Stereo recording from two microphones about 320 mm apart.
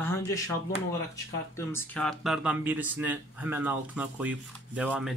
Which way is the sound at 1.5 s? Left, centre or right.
Centre.